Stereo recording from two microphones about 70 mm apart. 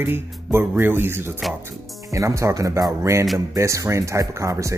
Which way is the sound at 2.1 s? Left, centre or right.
Right.